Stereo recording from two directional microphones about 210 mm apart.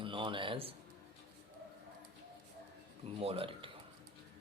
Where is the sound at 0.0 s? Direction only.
25° right (ahead or behind).